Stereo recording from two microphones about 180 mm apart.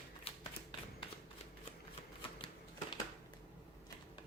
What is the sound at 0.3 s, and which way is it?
Typewriter, 35° left (ahead or behind).